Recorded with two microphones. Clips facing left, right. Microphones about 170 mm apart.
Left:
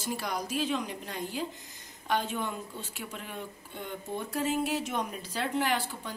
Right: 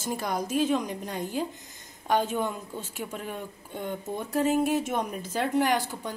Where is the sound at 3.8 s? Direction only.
45° right (ahead or behind).